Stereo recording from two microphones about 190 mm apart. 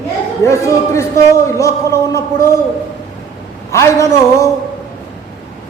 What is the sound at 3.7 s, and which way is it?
Speech, 15° left (ahead or behind).